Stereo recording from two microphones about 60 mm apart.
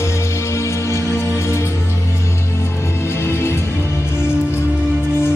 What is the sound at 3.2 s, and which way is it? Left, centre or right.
Music, left.